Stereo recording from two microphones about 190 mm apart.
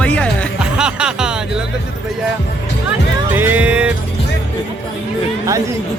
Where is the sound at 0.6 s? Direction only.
5° right (ahead or behind).